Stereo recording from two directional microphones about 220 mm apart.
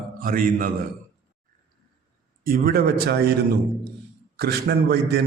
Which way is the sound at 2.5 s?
40° right (ahead or behind).